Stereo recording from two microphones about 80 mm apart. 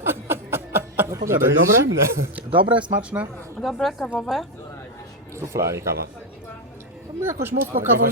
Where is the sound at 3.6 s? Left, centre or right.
Centre.